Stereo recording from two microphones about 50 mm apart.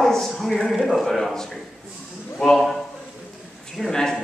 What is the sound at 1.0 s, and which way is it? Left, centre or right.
Speech, centre.